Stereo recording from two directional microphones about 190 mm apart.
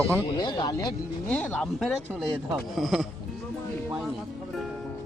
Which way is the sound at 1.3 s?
5° left (ahead or behind).